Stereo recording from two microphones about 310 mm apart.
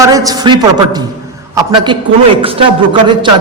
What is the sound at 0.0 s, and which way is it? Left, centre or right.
A man's voice, centre.